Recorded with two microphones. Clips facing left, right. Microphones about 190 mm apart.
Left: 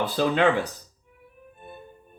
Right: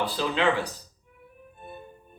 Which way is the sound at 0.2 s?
55° left (ahead or behind).